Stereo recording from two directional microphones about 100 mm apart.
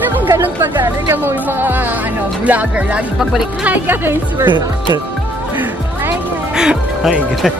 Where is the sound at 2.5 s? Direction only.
15° right (ahead or behind).